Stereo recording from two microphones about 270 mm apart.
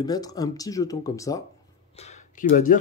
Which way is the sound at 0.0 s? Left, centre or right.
Centre.